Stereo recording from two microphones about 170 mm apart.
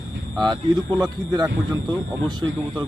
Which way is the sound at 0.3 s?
25° right (ahead or behind).